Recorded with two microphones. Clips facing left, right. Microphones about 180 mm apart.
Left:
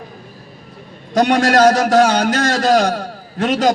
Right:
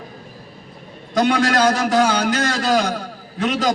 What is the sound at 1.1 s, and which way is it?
A man's voice, 50° left (ahead or behind).